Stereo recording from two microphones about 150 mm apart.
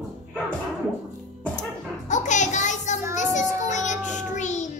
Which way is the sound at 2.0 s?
55° left (ahead or behind).